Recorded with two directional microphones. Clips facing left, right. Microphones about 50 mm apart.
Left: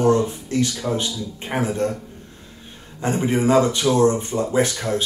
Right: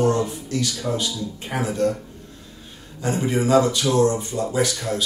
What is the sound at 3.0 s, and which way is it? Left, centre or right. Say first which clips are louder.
Speech: left 2 dB; left.